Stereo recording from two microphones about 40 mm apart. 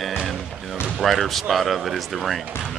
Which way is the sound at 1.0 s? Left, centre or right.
Centre.